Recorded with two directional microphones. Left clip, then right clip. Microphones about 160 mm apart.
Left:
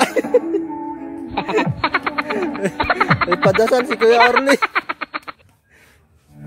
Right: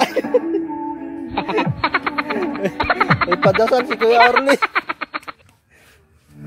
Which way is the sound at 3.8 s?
Centre (ahead or behind).